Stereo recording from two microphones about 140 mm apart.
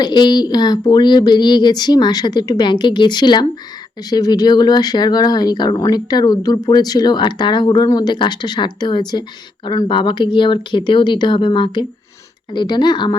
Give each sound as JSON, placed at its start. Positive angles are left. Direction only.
{"t": 0.0, "sound": "speech", "side_deg": 30}